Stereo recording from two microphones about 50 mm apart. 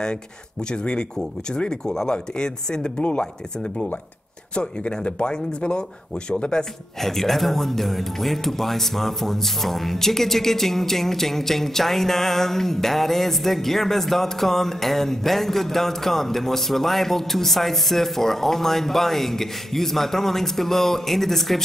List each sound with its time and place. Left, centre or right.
0.0 s speech: centre
7.0 s speech: centre